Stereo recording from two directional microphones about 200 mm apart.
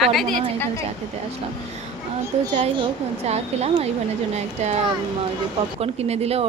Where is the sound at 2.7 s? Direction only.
30° right (ahead or behind).